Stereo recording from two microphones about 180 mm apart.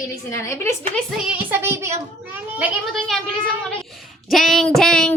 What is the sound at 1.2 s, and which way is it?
Child singing, 10° right (ahead or behind).